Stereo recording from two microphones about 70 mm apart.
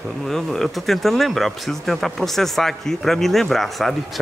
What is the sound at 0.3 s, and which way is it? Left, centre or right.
Speech, centre.